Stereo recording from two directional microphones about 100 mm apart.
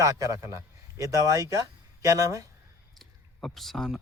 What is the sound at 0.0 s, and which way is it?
A man's voice, 35° right (ahead or behind).